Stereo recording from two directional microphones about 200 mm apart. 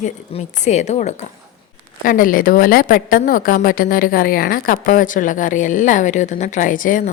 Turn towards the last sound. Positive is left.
turn(degrees=40)  # may be behind; listen again after turning